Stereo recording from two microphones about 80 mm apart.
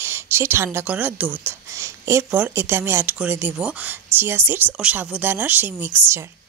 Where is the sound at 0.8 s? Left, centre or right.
Right.